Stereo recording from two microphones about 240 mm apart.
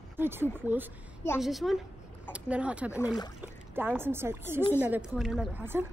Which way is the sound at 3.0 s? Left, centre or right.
Centre.